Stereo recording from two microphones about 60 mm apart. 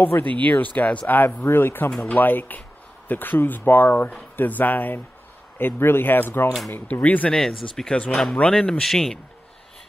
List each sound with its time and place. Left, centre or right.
0.0 s speech: left
1.9 s speech: centre
2.1 s speech: left
6.9 s speech: left
7.3 s speech: centre
7.9 s speech: centre
8.8 s speech: centre